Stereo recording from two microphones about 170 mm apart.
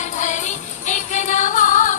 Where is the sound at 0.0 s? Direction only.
45° left (ahead or behind).